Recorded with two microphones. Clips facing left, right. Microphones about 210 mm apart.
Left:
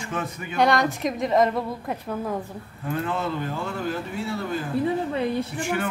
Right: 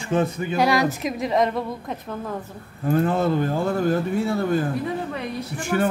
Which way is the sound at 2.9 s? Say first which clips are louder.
Right 7 dB; 40° right (ahead or behind).